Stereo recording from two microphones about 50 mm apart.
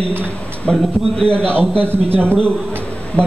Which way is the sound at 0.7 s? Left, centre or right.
Centre.